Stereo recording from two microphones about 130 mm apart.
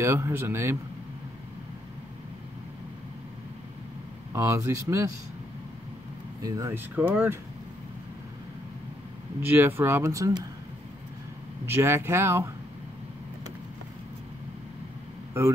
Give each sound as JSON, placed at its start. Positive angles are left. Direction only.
{"t": 0.0, "sound": "speech", "side_deg": -20}
{"t": 4.3, "sound": "speech", "side_deg": -20}
{"t": 6.4, "sound": "speech", "side_deg": -25}
{"t": 9.4, "sound": "speech", "side_deg": -15}
{"t": 11.6, "sound": "speech", "side_deg": -20}